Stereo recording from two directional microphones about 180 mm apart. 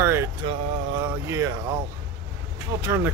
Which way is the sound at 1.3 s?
15° right (ahead or behind).